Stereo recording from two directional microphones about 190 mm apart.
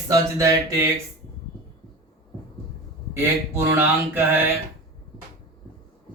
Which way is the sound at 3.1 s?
15° right (ahead or behind).